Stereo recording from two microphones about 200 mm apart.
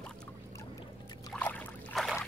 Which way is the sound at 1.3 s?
5° left (ahead or behind).